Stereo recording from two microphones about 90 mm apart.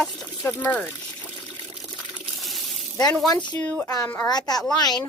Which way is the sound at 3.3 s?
55° left (ahead or behind).